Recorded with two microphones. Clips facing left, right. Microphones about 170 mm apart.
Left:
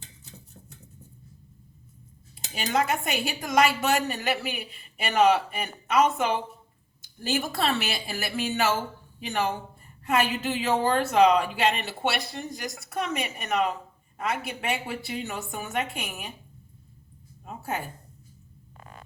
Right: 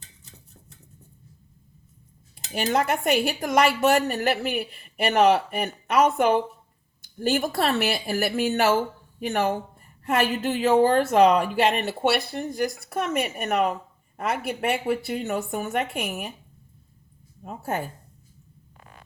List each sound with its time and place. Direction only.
2.3 s speech: 55° right (ahead or behind)
3.9 s a man's voice: centre (ahead or behind)
4.7 s a woman's voice: 55° right (ahead or behind)
12.0 s a man's voice: centre (ahead or behind)
12.3 s a woman's voice: 55° right (ahead or behind)
17.4 s a sound: 50° right (ahead or behind)